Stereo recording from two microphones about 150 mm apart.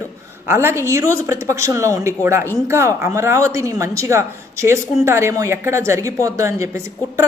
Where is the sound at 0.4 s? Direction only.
15° right (ahead or behind).